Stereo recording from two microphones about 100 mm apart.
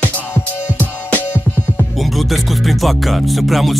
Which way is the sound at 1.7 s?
Centre (ahead or behind).